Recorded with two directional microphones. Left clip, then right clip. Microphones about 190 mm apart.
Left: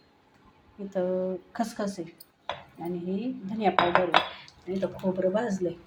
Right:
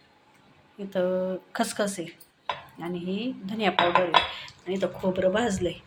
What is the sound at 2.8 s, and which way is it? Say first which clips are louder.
Speech: right 1 dB; centre (ahead or behind).